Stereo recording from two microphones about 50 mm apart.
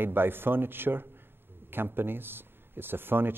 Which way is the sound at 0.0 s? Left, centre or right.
Right.